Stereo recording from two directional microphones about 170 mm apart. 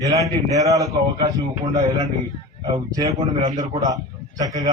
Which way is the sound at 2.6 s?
20° right (ahead or behind).